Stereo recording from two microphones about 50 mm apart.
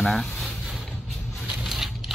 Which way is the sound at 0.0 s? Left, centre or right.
Centre.